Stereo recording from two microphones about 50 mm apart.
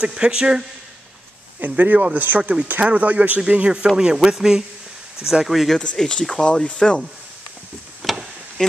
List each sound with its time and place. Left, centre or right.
0.0 s speech: centre
1.8 s a man's voice: right; by 5.8 s centre
5.9 s speech: centre
8.0 s a sound: centre
8.6 s speech: centre